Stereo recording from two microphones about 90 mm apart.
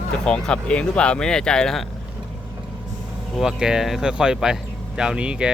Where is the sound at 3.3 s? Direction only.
5° right (ahead or behind).